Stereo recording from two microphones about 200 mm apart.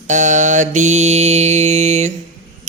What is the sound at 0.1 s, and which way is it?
A man's voice, 35° right (ahead or behind).